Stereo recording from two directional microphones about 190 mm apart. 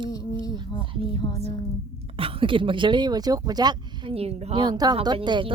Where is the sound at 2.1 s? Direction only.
30° right (ahead or behind).